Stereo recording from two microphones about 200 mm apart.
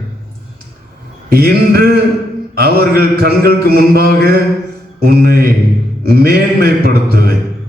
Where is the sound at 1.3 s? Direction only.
50° right (ahead or behind).